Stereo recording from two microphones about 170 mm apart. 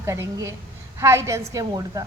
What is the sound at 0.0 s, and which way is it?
A woman's voice, 15° right (ahead or behind).